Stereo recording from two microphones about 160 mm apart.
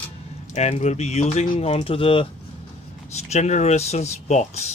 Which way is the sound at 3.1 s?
45° left (ahead or behind).